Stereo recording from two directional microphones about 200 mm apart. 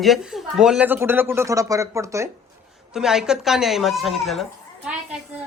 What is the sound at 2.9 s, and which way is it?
A man's voice, centre (ahead or behind).